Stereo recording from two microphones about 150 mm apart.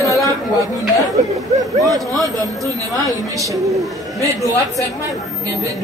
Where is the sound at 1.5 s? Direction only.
25° right (ahead or behind).